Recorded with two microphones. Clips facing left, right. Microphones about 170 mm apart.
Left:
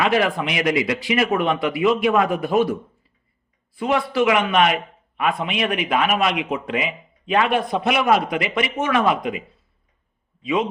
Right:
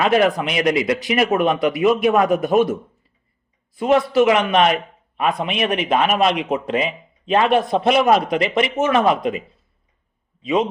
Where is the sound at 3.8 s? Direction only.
20° right (ahead or behind).